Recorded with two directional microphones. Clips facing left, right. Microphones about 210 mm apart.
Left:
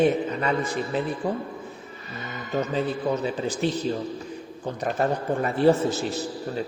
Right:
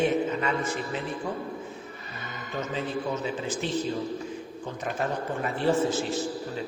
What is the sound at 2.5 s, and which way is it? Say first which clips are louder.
A man's voice: left 5 dB; 35° left (ahead or behind).